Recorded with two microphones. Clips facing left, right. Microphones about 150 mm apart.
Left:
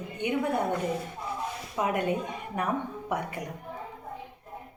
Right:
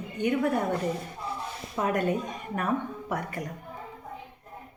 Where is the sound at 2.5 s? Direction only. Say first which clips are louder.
Right 1 dB; 15° left (ahead or behind).